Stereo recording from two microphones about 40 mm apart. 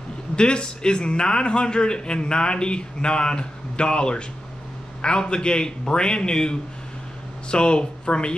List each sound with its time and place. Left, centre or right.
0.4 s a man's voice: left